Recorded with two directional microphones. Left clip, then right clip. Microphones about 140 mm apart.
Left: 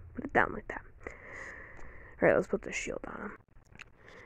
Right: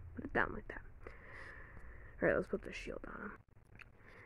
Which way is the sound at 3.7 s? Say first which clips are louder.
Left 7 dB; 25° left (ahead or behind).